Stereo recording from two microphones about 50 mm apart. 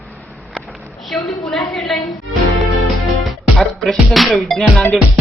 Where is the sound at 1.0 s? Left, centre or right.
Centre.